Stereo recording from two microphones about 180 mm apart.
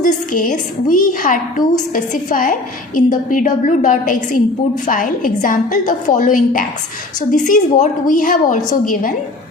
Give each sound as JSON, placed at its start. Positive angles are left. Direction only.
{"t": 0.0, "sound": "a woman's voice", "side_deg": 45}